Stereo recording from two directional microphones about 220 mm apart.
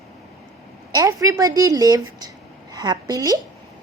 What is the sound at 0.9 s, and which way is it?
A woman's voice, 15° right (ahead or behind).